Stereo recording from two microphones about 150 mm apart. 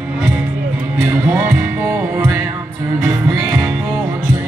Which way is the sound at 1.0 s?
15° right (ahead or behind).